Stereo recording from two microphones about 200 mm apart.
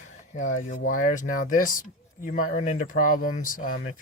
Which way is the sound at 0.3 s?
40° left (ahead or behind).